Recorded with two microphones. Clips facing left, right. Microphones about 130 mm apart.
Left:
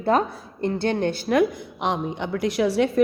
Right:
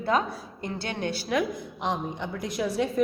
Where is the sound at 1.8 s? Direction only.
75° left (ahead or behind).